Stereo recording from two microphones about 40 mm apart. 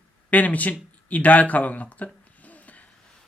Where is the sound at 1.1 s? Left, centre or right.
Left.